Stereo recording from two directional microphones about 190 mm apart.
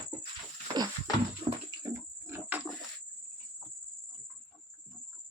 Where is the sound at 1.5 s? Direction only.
25° right (ahead or behind).